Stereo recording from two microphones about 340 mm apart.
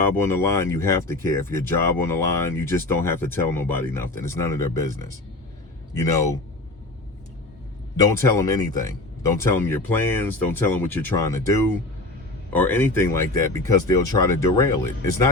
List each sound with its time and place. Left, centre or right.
0.0 s speech: centre
6.0 s speech: centre
8.2 s speech: centre